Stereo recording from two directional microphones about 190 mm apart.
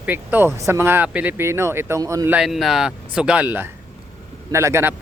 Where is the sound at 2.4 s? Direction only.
Centre (ahead or behind).